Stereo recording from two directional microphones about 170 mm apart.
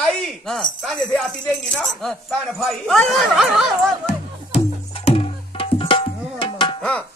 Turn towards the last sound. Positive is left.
turn(degrees=30)  # may be behind; listen again after turning